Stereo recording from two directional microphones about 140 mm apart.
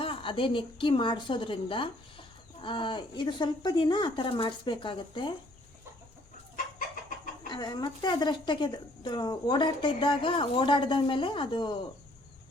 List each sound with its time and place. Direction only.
0.0 s a woman's voice: 40° left (ahead or behind)
7.4 s a woman's voice: 30° left (ahead or behind)